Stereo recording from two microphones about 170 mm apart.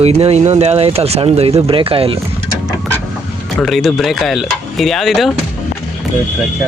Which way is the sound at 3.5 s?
Centre (ahead or behind).